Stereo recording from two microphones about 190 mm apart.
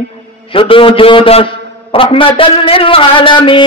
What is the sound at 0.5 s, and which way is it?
A man's voice, 30° left (ahead or behind).